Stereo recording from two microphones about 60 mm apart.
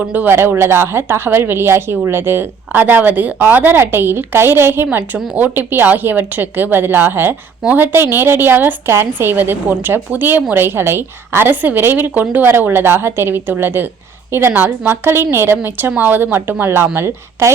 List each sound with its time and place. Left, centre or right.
0.0 s speech: right
0.3 s a woman's voice: right
12.5 s a woman's voice: right